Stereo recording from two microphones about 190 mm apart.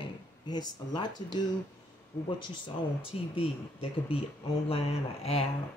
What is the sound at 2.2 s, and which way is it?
Speech, 25° left (ahead or behind).